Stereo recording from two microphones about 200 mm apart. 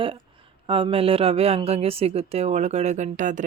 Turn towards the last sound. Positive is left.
turn(degrees=-40)  # may be behind; listen again after turning